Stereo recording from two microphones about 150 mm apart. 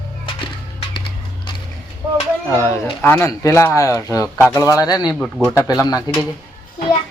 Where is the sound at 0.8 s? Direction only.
35° left (ahead or behind).